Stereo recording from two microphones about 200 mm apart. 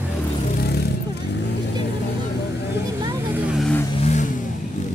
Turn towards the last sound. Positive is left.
turn(degrees=35)  # may be behind; listen again after turning